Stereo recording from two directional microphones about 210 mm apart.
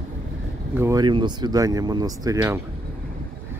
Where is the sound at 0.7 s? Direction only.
15° right (ahead or behind).